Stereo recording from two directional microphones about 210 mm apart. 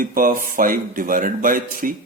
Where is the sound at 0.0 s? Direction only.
40° right (ahead or behind).